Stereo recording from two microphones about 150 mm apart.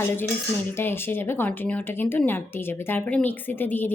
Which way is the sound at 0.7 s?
15° left (ahead or behind).